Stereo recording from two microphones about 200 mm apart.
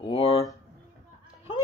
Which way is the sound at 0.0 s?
30° left (ahead or behind).